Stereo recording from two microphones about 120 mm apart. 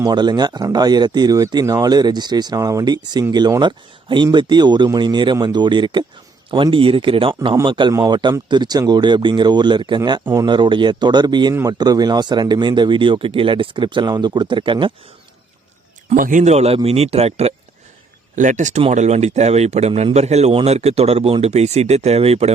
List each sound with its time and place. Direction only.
0.0 s speech: 35° right (ahead or behind)
16.0 s speech: 85° right; by 17.5 s 60° right (ahead or behind)
18.3 s speech: 90° right
18.9 s speech: 70° right (ahead or behind)
20.5 s speech: 55° right (ahead or behind)